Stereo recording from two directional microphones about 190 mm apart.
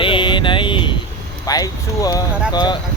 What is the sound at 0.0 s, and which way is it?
Vehicle, 25° left (ahead or behind).